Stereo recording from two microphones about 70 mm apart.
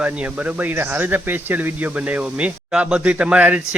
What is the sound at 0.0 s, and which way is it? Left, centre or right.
Speech, centre.